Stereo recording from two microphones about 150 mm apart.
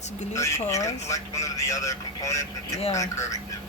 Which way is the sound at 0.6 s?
20° left (ahead or behind).